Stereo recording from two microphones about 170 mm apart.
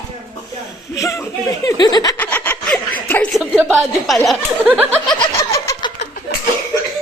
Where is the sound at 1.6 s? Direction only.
25° left (ahead or behind).